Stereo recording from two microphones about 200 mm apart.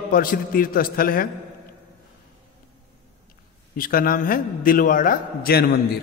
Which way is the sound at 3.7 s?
45° left (ahead or behind).